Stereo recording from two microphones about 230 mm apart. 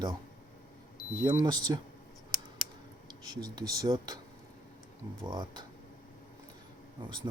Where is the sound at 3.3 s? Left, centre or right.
Centre.